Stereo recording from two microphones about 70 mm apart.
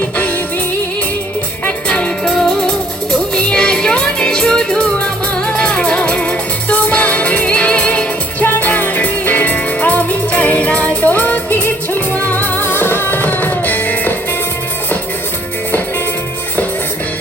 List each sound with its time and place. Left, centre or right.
1.6 s music: centre